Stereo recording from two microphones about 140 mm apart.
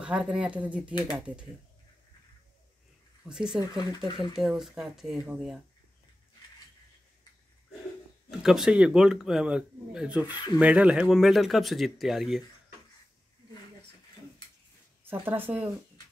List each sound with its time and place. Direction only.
0.0 s speech: 5° right (ahead or behind)
3.3 s speech: 5° right (ahead or behind)
8.3 s speech: 5° right (ahead or behind)
10.2 s speech: 30° left (ahead or behind)
10.6 s speech: 10° right (ahead or behind)
15.0 s speech: 15° right (ahead or behind)